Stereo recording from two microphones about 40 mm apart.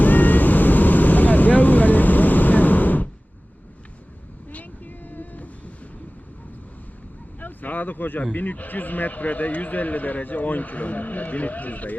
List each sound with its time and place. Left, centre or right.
0.0 s vehicle: left
4.4 s vehicle: left
7.3 s a sound: left
8.2 s speech: left